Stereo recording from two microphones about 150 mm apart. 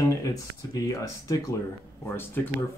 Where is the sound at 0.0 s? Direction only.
20° left (ahead or behind).